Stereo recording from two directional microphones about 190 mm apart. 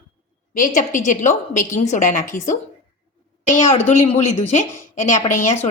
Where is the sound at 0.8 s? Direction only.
45° left (ahead or behind).